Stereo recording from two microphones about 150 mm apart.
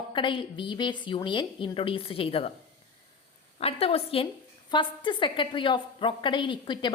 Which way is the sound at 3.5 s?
40° left (ahead or behind).